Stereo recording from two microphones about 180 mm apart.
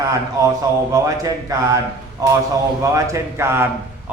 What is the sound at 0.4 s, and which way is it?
A man's voice, 20° right (ahead or behind).